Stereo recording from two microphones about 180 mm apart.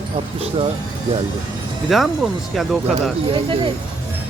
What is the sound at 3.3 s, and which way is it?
Speech, 30° right (ahead or behind).